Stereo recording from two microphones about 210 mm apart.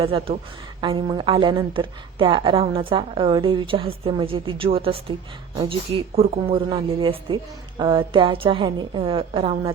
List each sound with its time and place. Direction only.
0.0 s a woman's voice: 25° right (ahead or behind)